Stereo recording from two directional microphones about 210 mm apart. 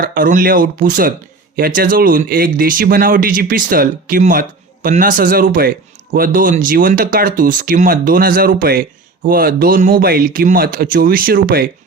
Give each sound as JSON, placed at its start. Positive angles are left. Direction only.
{"t": 0.0, "sound": "speech", "side_deg": -40}